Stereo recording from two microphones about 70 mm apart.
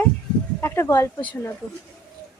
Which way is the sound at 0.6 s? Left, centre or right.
Left.